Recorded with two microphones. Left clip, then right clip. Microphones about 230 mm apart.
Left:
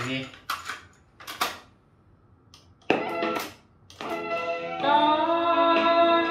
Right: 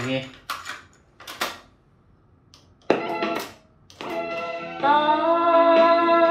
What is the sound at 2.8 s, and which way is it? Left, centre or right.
Music, centre.